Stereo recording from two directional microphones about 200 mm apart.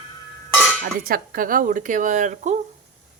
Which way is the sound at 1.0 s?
45° right (ahead or behind).